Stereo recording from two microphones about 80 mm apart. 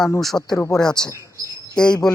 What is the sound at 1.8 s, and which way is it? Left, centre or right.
Speech, centre.